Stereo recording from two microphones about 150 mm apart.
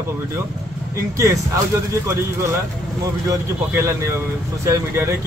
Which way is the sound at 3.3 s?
20° right (ahead or behind).